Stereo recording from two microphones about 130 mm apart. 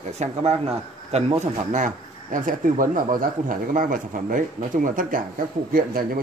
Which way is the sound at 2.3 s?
90° right.